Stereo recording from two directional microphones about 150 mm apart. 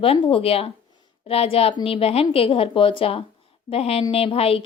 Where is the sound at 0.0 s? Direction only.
40° left (ahead or behind).